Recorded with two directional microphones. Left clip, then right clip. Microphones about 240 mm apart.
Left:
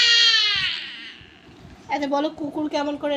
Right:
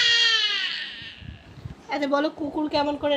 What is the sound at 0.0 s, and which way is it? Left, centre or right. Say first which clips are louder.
Baby cry: left 3 dB; centre.